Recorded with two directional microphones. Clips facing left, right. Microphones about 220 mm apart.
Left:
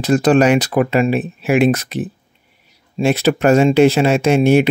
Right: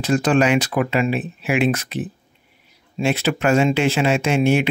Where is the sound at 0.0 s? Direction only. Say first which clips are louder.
Left 5 dB; 40° left (ahead or behind).